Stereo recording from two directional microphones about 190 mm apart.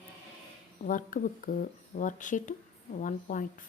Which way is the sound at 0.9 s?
45° left (ahead or behind).